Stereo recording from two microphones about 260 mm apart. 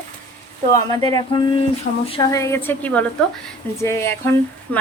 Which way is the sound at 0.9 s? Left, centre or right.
Centre.